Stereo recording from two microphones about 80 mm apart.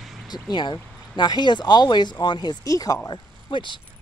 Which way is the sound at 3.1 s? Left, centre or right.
Left.